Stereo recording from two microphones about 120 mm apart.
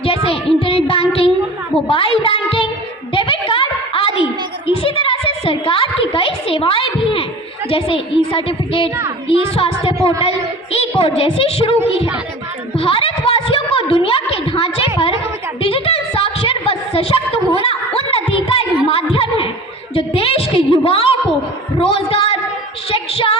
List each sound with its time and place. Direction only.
0.3 s music: 50° left (ahead or behind)
1.9 s speech: 50° left (ahead or behind)
3.1 s a sound: 45° left (ahead or behind)
7.7 s a woman's voice: 50° left (ahead or behind)
11.8 s speech: 10° right (ahead or behind)
12.7 s a sound: 55° left (ahead or behind)
19.9 s a woman's voice: 50° left (ahead or behind)